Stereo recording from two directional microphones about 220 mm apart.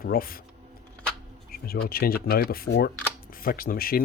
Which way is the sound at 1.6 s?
45° left (ahead or behind).